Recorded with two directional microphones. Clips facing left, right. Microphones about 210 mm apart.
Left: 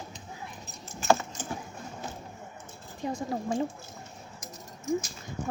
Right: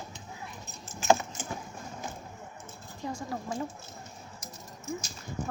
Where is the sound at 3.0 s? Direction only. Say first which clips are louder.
Left 4 dB; 20° left (ahead or behind).